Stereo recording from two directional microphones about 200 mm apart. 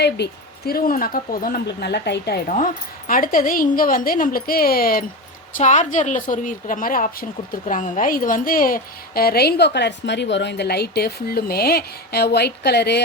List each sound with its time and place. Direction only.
0.0 s a woman's voice: 55° left (ahead or behind)
3.1 s a woman's voice: 45° left (ahead or behind)
5.5 s a woman's voice: 35° left (ahead or behind); by 13.0 s 55° left (ahead or behind)